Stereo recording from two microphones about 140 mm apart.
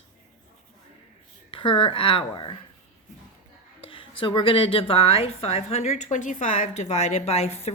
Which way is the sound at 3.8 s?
40° left (ahead or behind).